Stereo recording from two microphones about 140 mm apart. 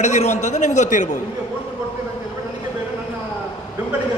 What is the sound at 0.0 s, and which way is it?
A man's voice, 55° left (ahead or behind).